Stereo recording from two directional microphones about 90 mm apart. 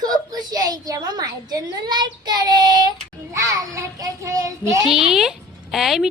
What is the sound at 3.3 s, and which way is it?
A child's voice, 35° right (ahead or behind).